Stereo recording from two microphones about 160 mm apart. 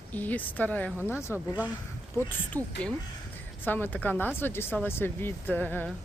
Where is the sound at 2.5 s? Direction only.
10° left (ahead or behind).